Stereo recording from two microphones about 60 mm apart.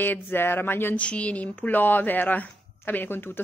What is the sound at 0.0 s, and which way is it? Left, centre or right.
Speech, left.